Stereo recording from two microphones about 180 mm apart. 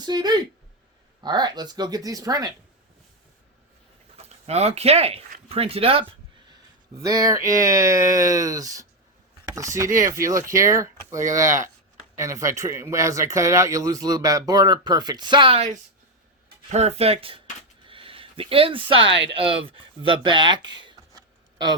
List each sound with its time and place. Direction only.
0.0 s speech: 25° right (ahead or behind)
4.4 s speech: 35° right (ahead or behind)
7.0 s speech: 20° right (ahead or behind)
17.8 s a sound: 30° right (ahead or behind)
19.3 s speech: 30° right (ahead or behind)